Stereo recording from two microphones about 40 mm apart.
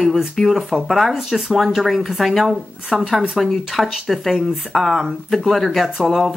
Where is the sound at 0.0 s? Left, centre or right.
Centre.